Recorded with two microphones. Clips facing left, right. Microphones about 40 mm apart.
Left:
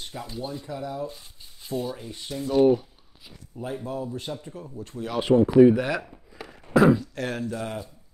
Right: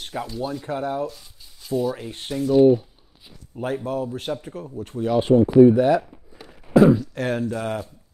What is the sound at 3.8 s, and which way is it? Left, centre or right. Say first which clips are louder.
Speech: right 5 dB; right.